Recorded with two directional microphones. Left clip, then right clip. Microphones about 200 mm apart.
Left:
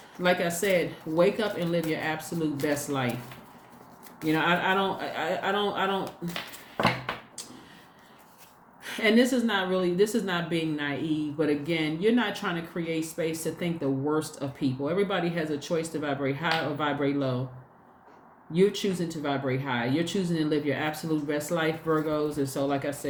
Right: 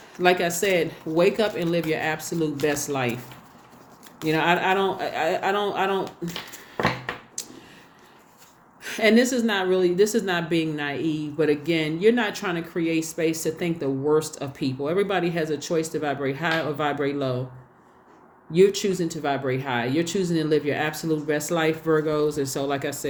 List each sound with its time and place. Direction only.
0.2 s a woman's voice: 40° right (ahead or behind)
4.3 s a woman's voice: 40° right (ahead or behind)
7.4 s a sound: 40° right (ahead or behind)
8.8 s a woman's voice: 40° right (ahead or behind)
18.5 s a woman's voice: 40° right (ahead or behind)